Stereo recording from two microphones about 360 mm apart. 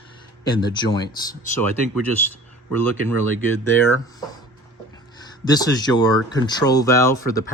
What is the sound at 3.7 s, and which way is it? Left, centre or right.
Speech, centre.